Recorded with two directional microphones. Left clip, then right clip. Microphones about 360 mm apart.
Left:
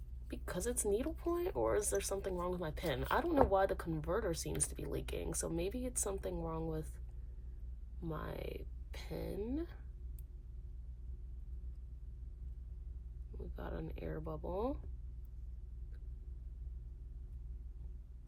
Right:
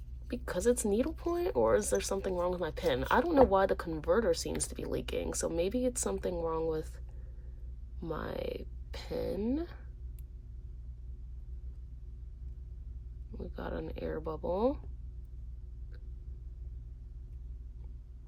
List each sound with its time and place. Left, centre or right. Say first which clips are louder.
0.3 s speech: right 11 dB; right
8.0 s speech: right 7 dB; right
13.3 s speech: right 7 dB; right